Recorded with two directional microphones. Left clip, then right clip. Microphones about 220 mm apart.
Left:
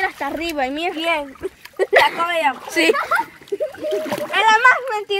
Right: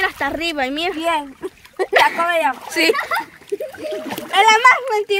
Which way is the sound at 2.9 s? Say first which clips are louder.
Left 2 dB; 45° right (ahead or behind).